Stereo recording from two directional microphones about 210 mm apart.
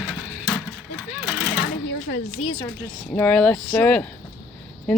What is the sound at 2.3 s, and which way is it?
Speech, 25° left (ahead or behind).